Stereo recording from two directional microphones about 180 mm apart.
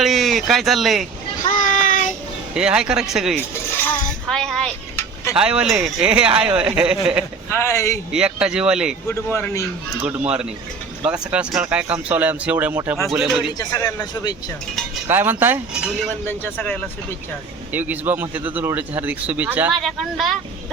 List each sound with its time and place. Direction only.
0.0 s speech: centre (ahead or behind)
1.4 s child singing: 45° left (ahead or behind)
2.6 s speech: 5° right (ahead or behind)
7.5 s a man's voice: 15° left (ahead or behind)
8.1 s speech: 5° right (ahead or behind)
9.0 s a man's voice: 10° left (ahead or behind)
10.1 s speech: 5° right (ahead or behind)
13.6 s a man's voice: 20° left (ahead or behind)
15.0 s speech: 10° right (ahead or behind)
16.2 s a man's voice: 10° left (ahead or behind)
17.7 s speech: 10° right (ahead or behind)